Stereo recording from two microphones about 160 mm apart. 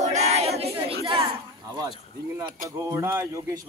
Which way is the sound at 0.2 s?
40° right (ahead or behind).